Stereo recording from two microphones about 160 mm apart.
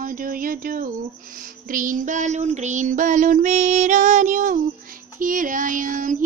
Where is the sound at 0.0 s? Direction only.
60° right (ahead or behind).